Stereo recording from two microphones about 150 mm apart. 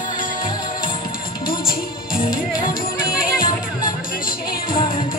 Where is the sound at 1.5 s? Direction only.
75° left (ahead or behind).